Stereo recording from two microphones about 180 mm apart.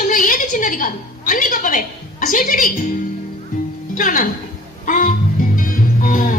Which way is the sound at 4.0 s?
50° left (ahead or behind).